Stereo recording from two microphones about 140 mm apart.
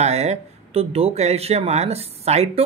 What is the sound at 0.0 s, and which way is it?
Speech, 50° right (ahead or behind).